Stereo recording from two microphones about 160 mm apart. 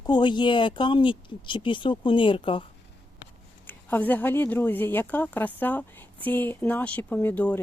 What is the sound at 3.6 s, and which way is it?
Speech, 10° left (ahead or behind).